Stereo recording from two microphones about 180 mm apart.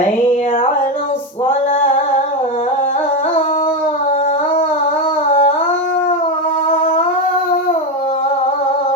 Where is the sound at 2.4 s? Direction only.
35° left (ahead or behind).